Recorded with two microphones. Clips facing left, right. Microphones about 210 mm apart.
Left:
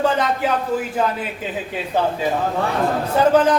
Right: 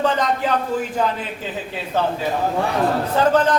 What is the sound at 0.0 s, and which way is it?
Speech, 5° left (ahead or behind).